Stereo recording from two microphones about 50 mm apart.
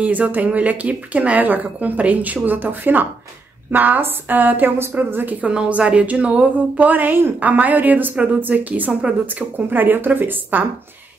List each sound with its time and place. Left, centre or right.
0.0 s a woman's voice: right
5.4 s a woman's voice: right
6.9 s a woman's voice: right